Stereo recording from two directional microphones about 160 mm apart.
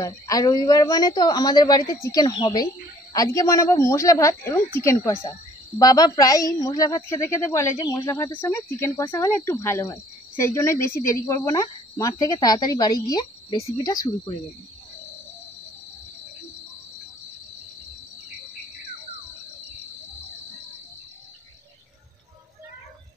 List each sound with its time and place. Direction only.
0.0 s speech: 25° left (ahead or behind)